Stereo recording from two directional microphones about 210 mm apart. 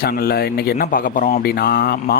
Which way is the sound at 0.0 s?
45° left (ahead or behind).